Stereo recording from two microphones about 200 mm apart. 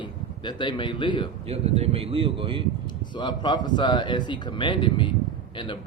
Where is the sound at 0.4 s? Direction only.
20° left (ahead or behind).